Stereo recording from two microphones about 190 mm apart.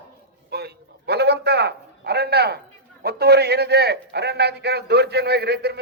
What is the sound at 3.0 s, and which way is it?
A man's voice, 60° right (ahead or behind).